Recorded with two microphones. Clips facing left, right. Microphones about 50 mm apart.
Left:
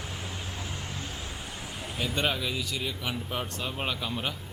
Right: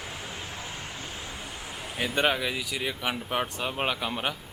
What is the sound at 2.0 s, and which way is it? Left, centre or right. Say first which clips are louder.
Speech: right 4 dB; centre.